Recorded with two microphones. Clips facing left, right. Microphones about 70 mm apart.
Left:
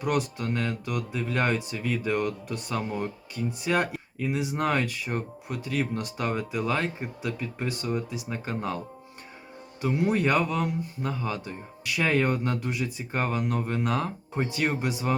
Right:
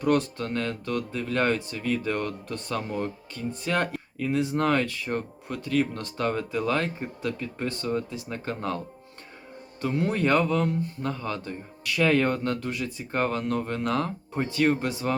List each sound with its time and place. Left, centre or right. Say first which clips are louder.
0.0 s speech: right 3 dB; centre
9.8 s speech: left 1 dB; centre